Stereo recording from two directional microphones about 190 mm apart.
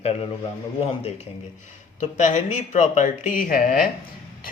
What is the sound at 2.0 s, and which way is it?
Speech, 40° left (ahead or behind).